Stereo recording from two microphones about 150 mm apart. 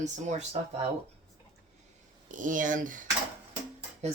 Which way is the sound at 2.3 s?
60° right (ahead or behind).